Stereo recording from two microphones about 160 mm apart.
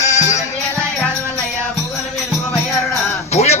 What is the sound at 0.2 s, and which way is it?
Music, 45° left (ahead or behind).